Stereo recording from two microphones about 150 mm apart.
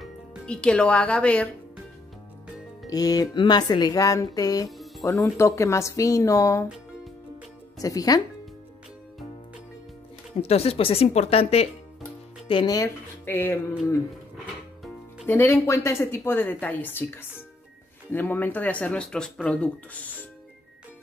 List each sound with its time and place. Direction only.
0.0 s speech: 5° left (ahead or behind)
2.9 s speech: 25° left (ahead or behind)
4.6 s music: centre (ahead or behind)
5.0 s speech: 20° left (ahead or behind)
7.8 s speech: 25° left (ahead or behind)
10.4 s speech: 40° left (ahead or behind)
12.4 s speech: 30° left (ahead or behind); by 13.6 s 15° left (ahead or behind)
15.2 s speech: 15° left (ahead or behind)